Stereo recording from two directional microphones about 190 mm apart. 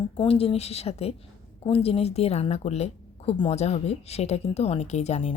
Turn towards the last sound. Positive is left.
turn(degrees=35)  # may be behind; listen again after turning